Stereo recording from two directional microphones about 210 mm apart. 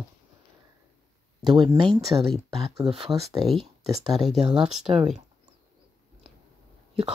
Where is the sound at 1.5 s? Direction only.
20° right (ahead or behind).